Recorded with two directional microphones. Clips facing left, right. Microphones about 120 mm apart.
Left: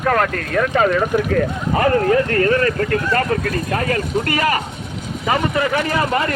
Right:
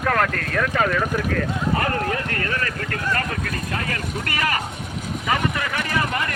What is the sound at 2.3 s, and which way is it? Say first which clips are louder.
Speech: left 10 dB; 35° left (ahead or behind).